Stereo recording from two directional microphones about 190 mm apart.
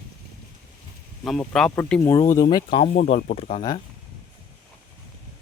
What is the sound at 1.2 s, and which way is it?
Speech, centre (ahead or behind).